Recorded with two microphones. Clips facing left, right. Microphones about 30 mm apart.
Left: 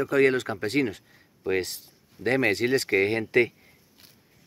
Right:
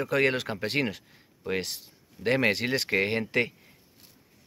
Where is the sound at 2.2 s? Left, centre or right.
Right.